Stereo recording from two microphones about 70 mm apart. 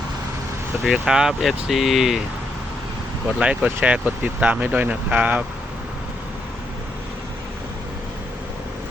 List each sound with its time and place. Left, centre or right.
0.9 s speech: centre
3.3 s speech: centre